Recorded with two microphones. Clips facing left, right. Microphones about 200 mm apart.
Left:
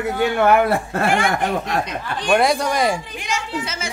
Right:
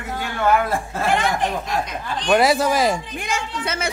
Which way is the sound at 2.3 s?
5° right (ahead or behind).